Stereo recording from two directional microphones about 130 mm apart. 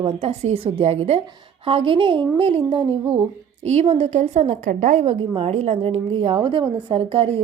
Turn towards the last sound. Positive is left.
turn(degrees=-45)  # may be behind; listen again after turning